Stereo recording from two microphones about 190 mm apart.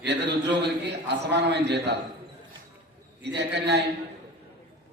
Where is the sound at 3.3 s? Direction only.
65° right (ahead or behind).